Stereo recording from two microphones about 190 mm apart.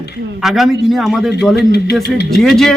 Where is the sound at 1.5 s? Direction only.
60° left (ahead or behind).